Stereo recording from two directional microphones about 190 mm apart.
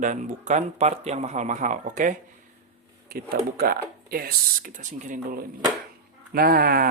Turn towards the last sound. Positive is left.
turn(degrees=-50)  # may be behind; listen again after turning